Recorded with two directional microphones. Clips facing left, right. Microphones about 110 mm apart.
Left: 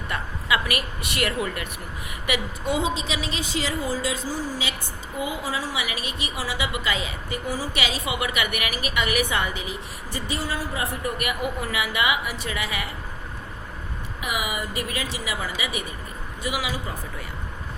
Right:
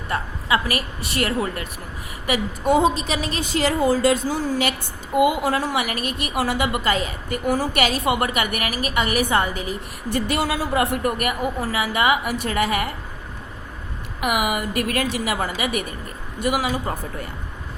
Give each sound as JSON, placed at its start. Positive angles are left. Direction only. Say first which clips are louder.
{"t": 0.1, "sound": "a woman's voice", "louder": "right 4 dB", "side_deg": -35}
{"t": 10.1, "sound": "speech", "louder": "right 7 dB", "side_deg": -65}
{"t": 11.2, "sound": "a woman's voice", "louder": "right 4 dB", "side_deg": -40}
{"t": 14.2, "sound": "a woman's voice", "louder": "right 7 dB", "side_deg": -55}